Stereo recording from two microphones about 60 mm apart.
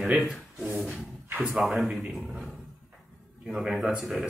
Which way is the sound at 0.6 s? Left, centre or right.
Right.